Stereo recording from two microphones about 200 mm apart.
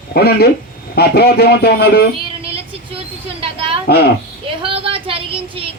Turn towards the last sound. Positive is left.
turn(degrees=-25)  # may be behind; listen again after turning